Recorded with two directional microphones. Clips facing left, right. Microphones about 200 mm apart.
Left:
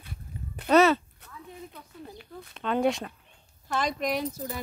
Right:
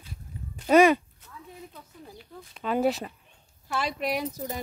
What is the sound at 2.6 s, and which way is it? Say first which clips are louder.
Speech: even; 5° right (ahead or behind).